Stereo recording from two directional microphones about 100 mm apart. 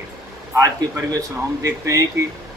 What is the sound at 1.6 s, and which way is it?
Speech, 30° right (ahead or behind).